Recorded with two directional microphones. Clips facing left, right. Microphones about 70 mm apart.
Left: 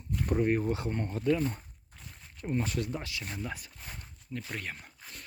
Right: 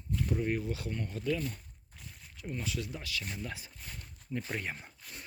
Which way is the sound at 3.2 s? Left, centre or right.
Centre.